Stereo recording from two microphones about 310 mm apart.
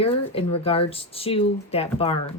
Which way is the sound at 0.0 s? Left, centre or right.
Centre.